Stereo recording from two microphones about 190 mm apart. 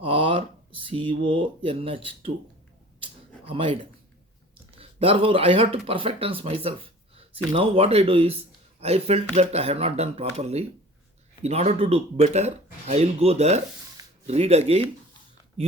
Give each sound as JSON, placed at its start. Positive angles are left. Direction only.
{"t": 0.0, "sound": "speech", "side_deg": -30}
{"t": 3.0, "sound": "a sound", "side_deg": -30}
{"t": 4.8, "sound": "speech", "side_deg": -30}